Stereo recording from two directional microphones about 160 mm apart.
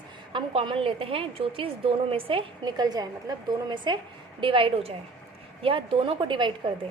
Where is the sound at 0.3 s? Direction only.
35° right (ahead or behind).